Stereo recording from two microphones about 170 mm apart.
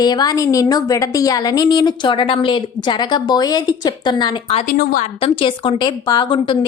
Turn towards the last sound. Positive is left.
turn(degrees=25)  # may be behind; listen again after turning